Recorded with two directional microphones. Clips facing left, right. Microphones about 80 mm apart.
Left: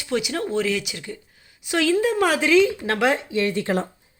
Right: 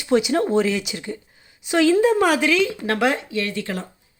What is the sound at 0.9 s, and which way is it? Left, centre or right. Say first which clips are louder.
Speech: right 4 dB; centre.